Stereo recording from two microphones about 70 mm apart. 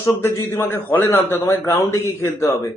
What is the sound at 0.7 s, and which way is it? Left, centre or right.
A man's voice, left.